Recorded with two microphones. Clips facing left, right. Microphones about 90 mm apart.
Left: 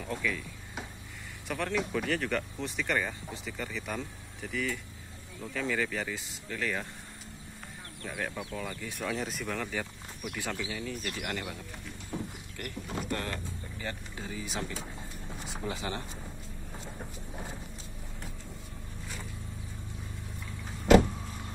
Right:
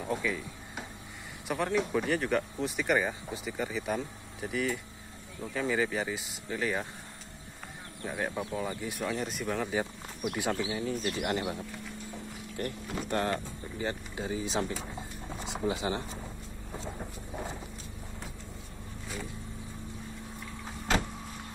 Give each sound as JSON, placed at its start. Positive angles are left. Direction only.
{"t": 0.0, "sound": "a sound", "side_deg": -15}
{"t": 1.5, "sound": "speech", "side_deg": -15}
{"t": 8.2, "sound": "speech", "side_deg": -20}
{"t": 9.7, "sound": "speech", "side_deg": -20}